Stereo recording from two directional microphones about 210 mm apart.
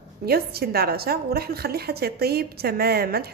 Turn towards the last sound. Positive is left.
turn(degrees=-50)  # may be behind; listen again after turning